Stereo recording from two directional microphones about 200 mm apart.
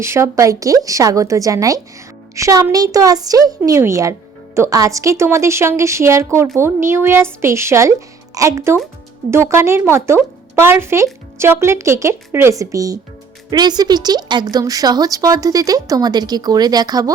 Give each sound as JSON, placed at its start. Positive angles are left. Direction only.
{"t": 0.0, "sound": "a woman's voice", "side_deg": -15}